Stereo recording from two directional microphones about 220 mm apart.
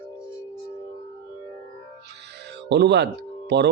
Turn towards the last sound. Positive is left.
turn(degrees=-50)  # may be behind; listen again after turning